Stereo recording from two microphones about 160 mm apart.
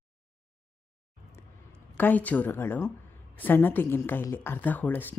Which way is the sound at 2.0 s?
10° left (ahead or behind).